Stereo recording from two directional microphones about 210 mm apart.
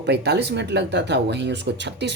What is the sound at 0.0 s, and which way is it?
Speech, 55° right (ahead or behind).